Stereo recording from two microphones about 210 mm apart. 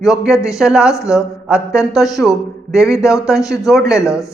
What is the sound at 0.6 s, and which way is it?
Speech, 5° right (ahead or behind).